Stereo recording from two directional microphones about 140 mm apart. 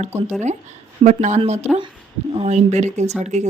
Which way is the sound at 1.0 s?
60° right (ahead or behind).